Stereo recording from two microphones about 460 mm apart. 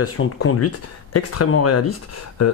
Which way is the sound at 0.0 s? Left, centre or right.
Left.